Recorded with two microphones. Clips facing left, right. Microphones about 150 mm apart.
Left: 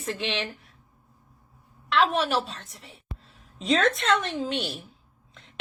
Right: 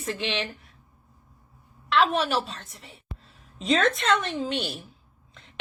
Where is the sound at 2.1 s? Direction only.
Centre (ahead or behind).